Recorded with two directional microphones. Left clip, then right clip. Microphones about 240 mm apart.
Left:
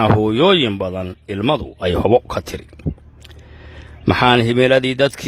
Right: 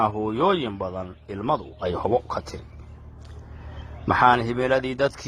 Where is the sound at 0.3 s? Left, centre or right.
Left.